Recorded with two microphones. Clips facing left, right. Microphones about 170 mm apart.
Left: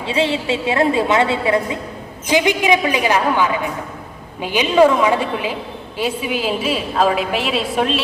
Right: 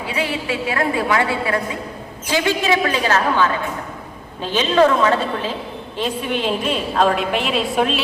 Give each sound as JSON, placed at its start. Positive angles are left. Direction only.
{"t": 0.0, "sound": "a woman's voice", "side_deg": 25}